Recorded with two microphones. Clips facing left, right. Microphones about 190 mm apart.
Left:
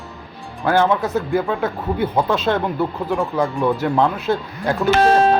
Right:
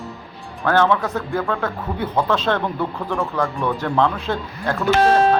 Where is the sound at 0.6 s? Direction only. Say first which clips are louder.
Left 1 dB; 10° left (ahead or behind).